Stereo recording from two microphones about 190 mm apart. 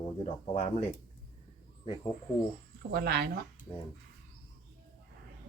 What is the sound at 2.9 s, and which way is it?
Speech, 55° right (ahead or behind).